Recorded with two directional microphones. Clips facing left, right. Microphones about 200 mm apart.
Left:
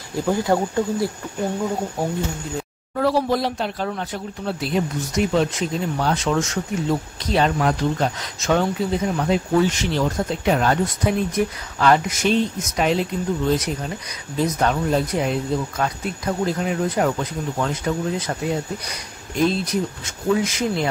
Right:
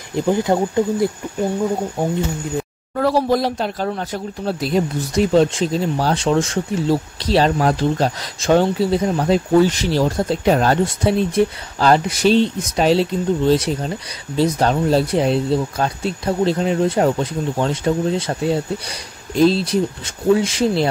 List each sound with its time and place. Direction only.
0.1 s speech: 20° right (ahead or behind)
3.0 s speech: 40° right (ahead or behind)